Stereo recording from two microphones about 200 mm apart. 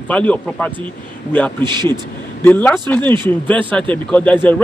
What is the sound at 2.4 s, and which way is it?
A man's voice, 10° left (ahead or behind).